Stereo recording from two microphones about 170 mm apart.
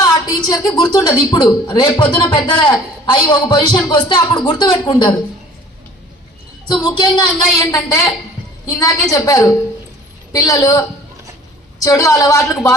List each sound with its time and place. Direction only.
0.0 s a woman's voice: 20° left (ahead or behind)
6.7 s a woman's voice: 25° left (ahead or behind)